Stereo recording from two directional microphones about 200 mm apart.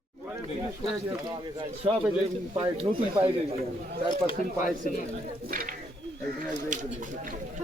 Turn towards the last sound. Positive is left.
turn(degrees=-45)  # may be behind; listen again after turning